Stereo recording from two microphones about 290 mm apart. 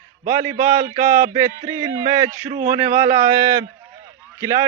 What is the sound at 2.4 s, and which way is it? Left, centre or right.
Speech, right.